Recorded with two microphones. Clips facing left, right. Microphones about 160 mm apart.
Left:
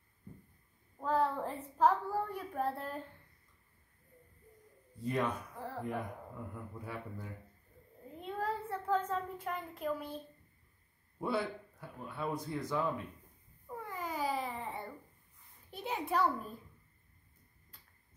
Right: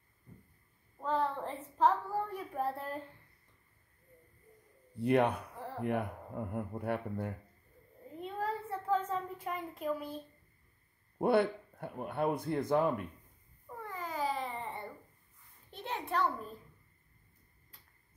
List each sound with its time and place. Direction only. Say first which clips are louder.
1.0 s a woman's voice: left 1 dB; 5° left (ahead or behind)
4.9 s a man's voice: right 6 dB; 65° right (ahead or behind)
8.2 s a sound: even; centre (ahead or behind)
11.1 s a man's voice: right 7 dB; 60° right (ahead or behind)
13.8 s babbling: right 1 dB; 10° left (ahead or behind)
15.7 s a sound: left 1 dB; 5° left (ahead or behind)